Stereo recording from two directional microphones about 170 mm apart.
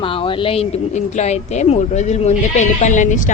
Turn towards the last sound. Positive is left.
turn(degrees=45)  # may be behind; listen again after turning